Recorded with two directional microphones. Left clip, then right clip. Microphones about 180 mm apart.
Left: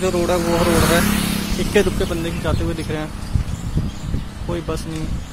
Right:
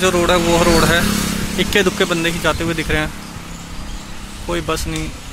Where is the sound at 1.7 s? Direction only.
10° right (ahead or behind).